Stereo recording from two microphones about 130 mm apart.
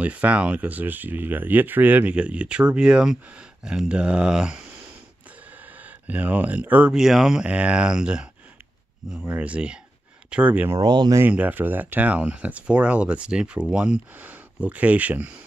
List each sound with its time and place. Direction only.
0.0 s speech: 10° right (ahead or behind)
5.8 s speech: 10° right (ahead or behind)
10.8 s speech: 35° right (ahead or behind)
11.1 s speech: 15° right (ahead or behind)